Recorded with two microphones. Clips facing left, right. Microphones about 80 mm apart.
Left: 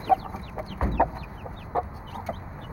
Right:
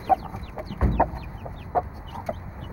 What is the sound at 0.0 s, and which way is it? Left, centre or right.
Chicken, centre.